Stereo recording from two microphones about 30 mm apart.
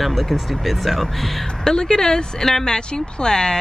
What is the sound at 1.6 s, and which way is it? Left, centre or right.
Speech, left.